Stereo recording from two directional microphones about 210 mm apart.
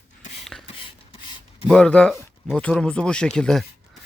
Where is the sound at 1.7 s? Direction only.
5° left (ahead or behind).